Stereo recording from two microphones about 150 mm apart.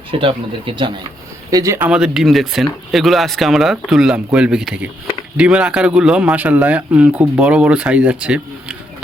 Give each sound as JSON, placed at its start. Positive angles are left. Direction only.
{"t": 0.1, "sound": "speech", "side_deg": -35}
{"t": 1.5, "sound": "speech", "side_deg": -20}
{"t": 1.8, "sound": "speech", "side_deg": -5}